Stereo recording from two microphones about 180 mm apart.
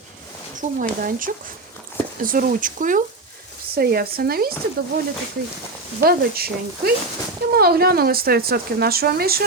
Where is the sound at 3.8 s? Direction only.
60° right (ahead or behind).